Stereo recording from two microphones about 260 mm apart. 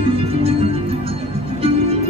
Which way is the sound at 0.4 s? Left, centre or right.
Right.